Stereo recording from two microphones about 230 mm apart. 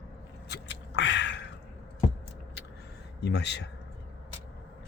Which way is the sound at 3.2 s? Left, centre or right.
Left.